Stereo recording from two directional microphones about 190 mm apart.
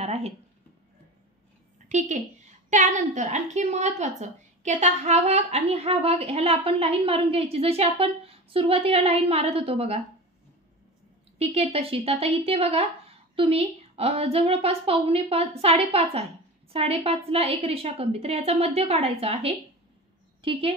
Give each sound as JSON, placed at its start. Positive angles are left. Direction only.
{"t": 0.0, "sound": "a sound", "side_deg": -35}
{"t": 1.9, "sound": "a woman's voice", "side_deg": -40}
{"t": 11.3, "sound": "a woman's voice", "side_deg": -30}